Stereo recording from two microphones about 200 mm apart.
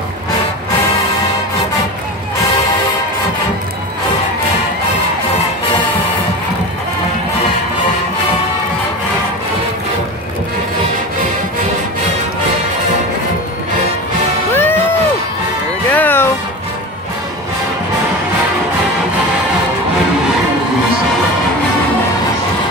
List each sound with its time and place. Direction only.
14.5 s music: 10° left (ahead or behind)
15.9 s music: 10° left (ahead or behind)